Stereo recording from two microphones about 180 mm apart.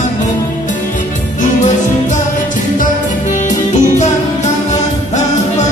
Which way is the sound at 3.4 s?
40° left (ahead or behind).